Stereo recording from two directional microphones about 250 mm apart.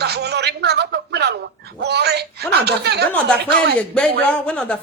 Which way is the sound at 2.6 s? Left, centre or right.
Right.